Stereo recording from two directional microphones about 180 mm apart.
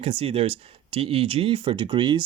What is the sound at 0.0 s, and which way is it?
Speech, 30° right (ahead or behind).